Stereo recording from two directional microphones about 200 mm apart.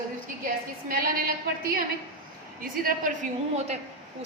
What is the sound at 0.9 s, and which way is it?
A woman's voice, 45° right (ahead or behind).